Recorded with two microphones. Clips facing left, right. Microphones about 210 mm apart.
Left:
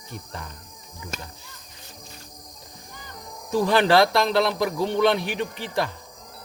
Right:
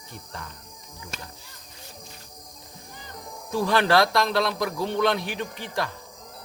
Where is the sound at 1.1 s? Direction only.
40° left (ahead or behind).